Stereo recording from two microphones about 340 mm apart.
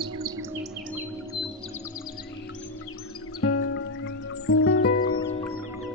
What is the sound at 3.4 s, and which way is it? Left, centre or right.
Music, left.